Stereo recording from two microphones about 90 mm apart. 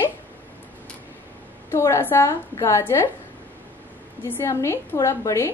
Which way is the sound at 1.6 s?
30° left (ahead or behind).